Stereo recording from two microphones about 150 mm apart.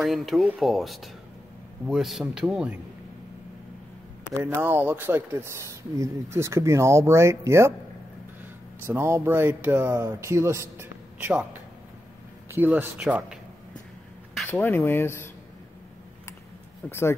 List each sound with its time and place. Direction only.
0.0 s speech: centre (ahead or behind)
4.3 s speech: 15° right (ahead or behind)
8.8 s speech: 15° right (ahead or behind)
12.4 s speech: 10° right (ahead or behind)
14.3 s speech: 10° left (ahead or behind)
16.8 s speech: 10° left (ahead or behind)